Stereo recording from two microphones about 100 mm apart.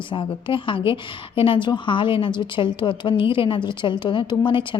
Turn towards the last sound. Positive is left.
turn(degrees=55)  # may be behind; listen again after turning